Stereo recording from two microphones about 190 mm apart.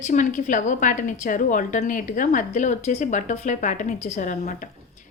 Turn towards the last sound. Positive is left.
turn(degrees=40)  # may be behind; listen again after turning